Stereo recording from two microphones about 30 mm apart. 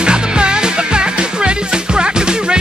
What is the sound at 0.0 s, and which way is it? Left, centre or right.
Music, right.